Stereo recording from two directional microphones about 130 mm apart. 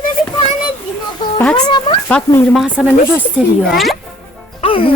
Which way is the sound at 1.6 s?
35° left (ahead or behind).